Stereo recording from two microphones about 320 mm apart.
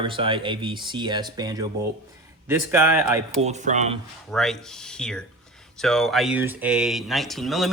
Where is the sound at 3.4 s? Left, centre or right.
Right.